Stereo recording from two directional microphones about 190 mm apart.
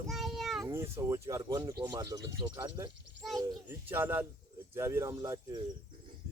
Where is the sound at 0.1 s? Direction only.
Centre (ahead or behind).